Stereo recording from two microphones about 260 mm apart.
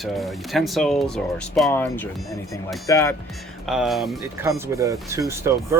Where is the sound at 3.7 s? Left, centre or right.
Centre.